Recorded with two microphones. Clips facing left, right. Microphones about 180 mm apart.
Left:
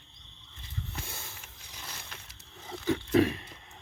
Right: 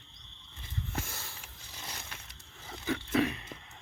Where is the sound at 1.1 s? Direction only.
25° left (ahead or behind).